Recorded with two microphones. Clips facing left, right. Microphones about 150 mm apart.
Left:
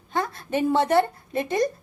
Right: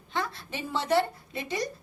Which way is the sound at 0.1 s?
50° left (ahead or behind).